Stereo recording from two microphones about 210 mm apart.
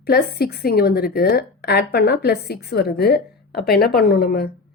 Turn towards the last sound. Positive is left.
turn(degrees=50)  # may be behind; listen again after turning